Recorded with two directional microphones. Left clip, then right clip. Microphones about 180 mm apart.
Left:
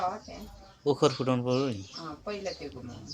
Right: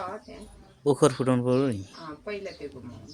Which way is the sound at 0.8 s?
55° right (ahead or behind).